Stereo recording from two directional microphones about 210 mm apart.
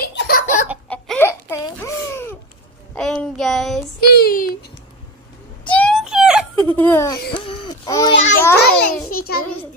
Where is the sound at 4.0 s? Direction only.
45° left (ahead or behind).